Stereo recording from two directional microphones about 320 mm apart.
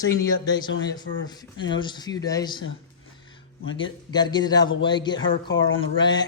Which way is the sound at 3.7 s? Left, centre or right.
Left.